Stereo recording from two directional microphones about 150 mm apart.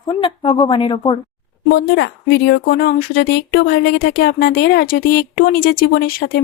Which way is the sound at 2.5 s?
90° left.